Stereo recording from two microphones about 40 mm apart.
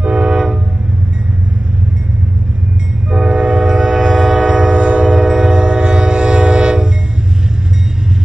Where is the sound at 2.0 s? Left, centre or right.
Right.